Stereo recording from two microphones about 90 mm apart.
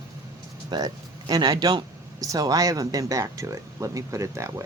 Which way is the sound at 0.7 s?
45° right (ahead or behind).